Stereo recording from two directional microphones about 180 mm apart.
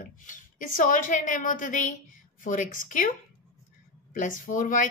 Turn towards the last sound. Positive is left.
turn(degrees=45)  # may be behind; listen again after turning